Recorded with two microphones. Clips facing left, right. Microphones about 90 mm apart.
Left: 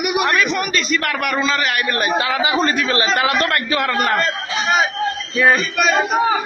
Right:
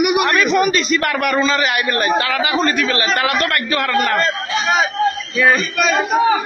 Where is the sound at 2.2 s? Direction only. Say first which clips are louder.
Even; 20° left (ahead or behind).